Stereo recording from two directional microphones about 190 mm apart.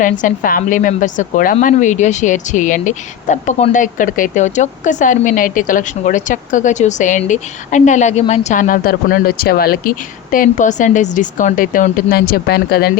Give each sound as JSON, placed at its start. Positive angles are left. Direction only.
{"t": 0.0, "sound": "a woman's voice", "side_deg": 45}